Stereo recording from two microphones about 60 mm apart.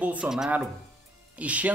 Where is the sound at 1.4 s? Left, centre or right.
Right.